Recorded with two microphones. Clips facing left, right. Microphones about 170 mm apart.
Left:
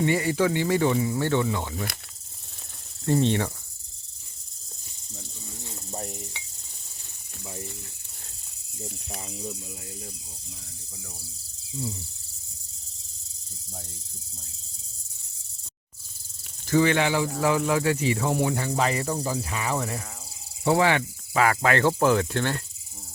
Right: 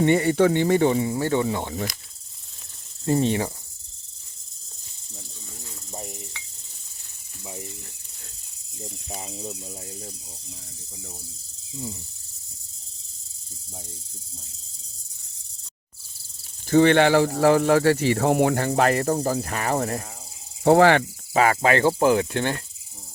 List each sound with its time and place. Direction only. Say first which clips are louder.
0.2 s speech: right 5 dB; 30° right (ahead or behind)
3.1 s speech: right 1 dB; 10° right (ahead or behind)
5.9 s cricket: left 1 dB; centre (ahead or behind)
9.0 s speech: right 3 dB; 20° right (ahead or behind)
16.6 s speech: right 5 dB; 55° right (ahead or behind)
17.3 s speech: right 6 dB; 40° right (ahead or behind)
17.9 s speech: right 5 dB; 60° right (ahead or behind)
21.3 s speech: right 3 dB; 25° right (ahead or behind)